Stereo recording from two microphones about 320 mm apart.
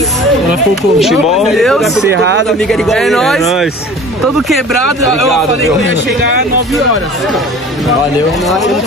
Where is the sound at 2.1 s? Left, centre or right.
Right.